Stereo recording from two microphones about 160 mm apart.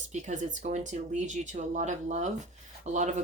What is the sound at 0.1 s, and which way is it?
Speech, 45° right (ahead or behind).